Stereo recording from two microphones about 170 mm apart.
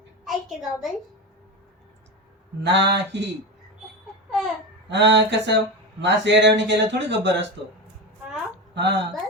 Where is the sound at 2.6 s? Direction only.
90° right.